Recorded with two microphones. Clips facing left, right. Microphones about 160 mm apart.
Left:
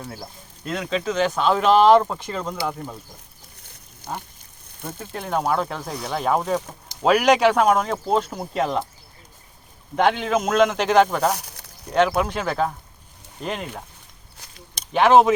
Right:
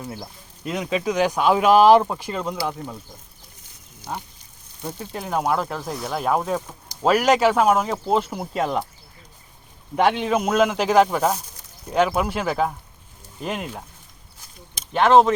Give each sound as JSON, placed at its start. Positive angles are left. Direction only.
{"t": 0.1, "sound": "speech", "side_deg": 5}
{"t": 0.7, "sound": "speech", "side_deg": -10}
{"t": 4.0, "sound": "speech", "side_deg": 50}
{"t": 4.9, "sound": "speech", "side_deg": -5}
{"t": 9.9, "sound": "speech", "side_deg": -5}
{"t": 11.3, "sound": "a sound", "side_deg": 70}
{"t": 11.9, "sound": "speech", "side_deg": -5}